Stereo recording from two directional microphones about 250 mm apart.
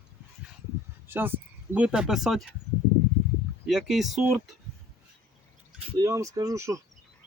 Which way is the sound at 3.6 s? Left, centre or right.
Centre.